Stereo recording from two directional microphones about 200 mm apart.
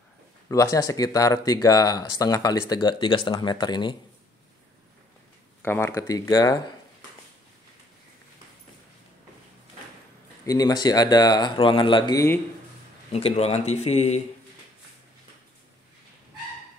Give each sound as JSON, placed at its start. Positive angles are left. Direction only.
{"t": 0.5, "sound": "speech", "side_deg": 15}
{"t": 5.6, "sound": "speech", "side_deg": 10}
{"t": 10.4, "sound": "speech", "side_deg": 20}
{"t": 13.1, "sound": "speech", "side_deg": 30}